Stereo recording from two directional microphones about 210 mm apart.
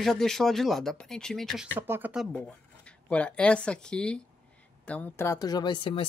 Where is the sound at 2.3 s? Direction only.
5° left (ahead or behind).